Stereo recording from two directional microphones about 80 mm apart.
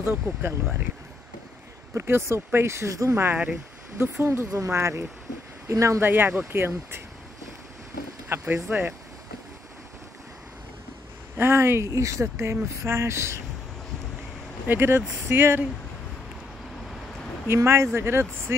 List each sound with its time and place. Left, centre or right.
0.0 s speech: right
2.0 s speech: right
6.0 s speech: right
8.3 s speech: right
11.3 s speech: right
14.7 s speech: right
17.5 s speech: right